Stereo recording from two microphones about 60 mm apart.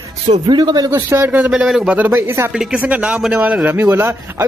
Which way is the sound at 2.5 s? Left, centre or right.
Centre.